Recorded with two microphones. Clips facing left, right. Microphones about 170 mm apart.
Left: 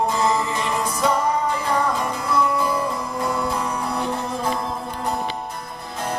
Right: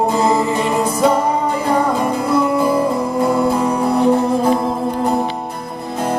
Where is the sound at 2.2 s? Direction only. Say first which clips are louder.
Right 5 dB; 55° right (ahead or behind).